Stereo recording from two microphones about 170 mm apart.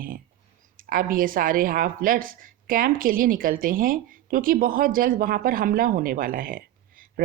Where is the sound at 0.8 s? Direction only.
55° right (ahead or behind).